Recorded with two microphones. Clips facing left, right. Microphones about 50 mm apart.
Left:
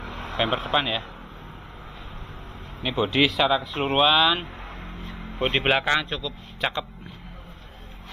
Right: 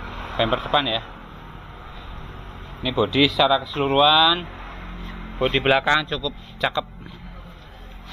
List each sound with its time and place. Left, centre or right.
0.0 s vehicle: centre
0.5 s speech: centre
0.7 s speech: centre
2.8 s speech: centre
4.6 s music: centre
5.4 s a man's voice: centre